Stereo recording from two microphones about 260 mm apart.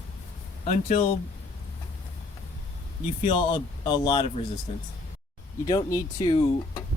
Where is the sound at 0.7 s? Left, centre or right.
Left.